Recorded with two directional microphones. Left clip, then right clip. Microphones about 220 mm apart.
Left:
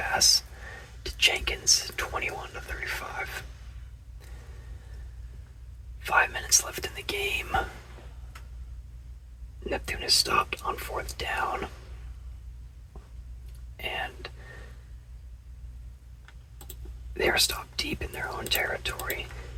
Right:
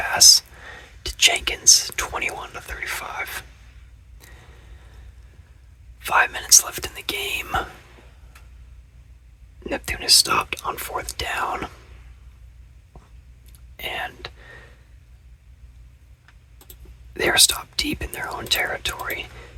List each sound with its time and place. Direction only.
0.0 s speech: 40° right (ahead or behind)
6.0 s speech: 40° right (ahead or behind)
9.6 s speech: 45° right (ahead or behind)
13.7 s whispering: 40° right (ahead or behind)
17.2 s speech: 40° right (ahead or behind)